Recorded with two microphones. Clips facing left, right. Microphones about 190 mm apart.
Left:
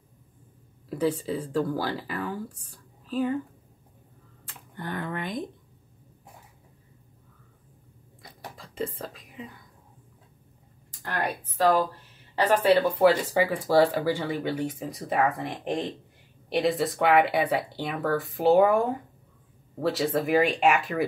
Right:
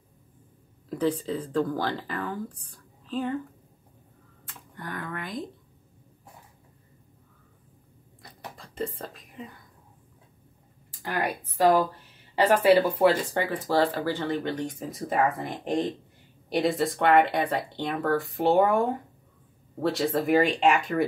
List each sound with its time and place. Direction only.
0.8 s speech: 10° left (ahead or behind)
4.5 s speech: 30° left (ahead or behind)
8.2 s whispering: centre (ahead or behind)
10.9 s a woman's voice: 10° right (ahead or behind)
13.0 s speech: 5° left (ahead or behind)